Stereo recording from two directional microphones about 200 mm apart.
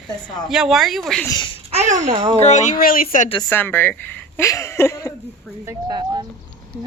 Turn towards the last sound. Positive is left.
turn(degrees=-20)  # may be behind; listen again after turning